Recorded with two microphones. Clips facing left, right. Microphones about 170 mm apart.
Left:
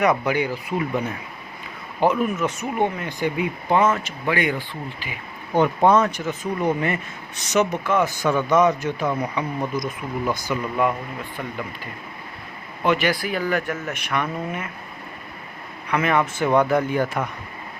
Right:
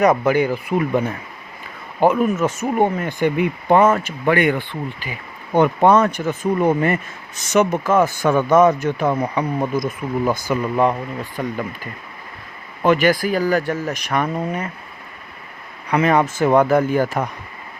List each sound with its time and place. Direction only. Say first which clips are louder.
0.0 s speech: right 5 dB; 45° right (ahead or behind)
2.0 s speech: right 4 dB; 45° right (ahead or behind)
11.4 s speech: right 8 dB; 45° right (ahead or behind)
12.8 s speech: right 5 dB; 45° right (ahead or behind)
15.9 s speech: right 4 dB; 35° right (ahead or behind)